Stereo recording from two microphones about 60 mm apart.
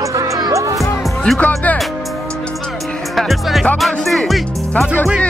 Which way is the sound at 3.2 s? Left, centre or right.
Centre.